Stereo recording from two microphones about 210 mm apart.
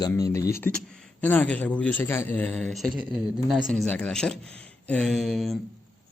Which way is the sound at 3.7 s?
5° left (ahead or behind).